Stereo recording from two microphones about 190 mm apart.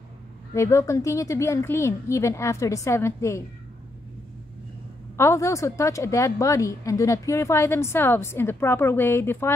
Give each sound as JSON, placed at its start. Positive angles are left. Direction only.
{"t": 0.6, "sound": "a woman's voice", "side_deg": 15}
{"t": 5.1, "sound": "a woman's voice", "side_deg": 15}